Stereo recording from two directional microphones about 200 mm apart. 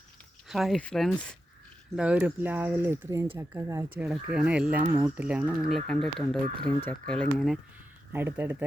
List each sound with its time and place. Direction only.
0.4 s speech: centre (ahead or behind)
2.0 s speech: 5° right (ahead or behind)
6.4 s speech: 25° right (ahead or behind)
7.1 s speech: 5° left (ahead or behind)
8.1 s speech: 10° right (ahead or behind)